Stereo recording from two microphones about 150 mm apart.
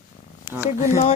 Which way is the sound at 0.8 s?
50° left (ahead or behind).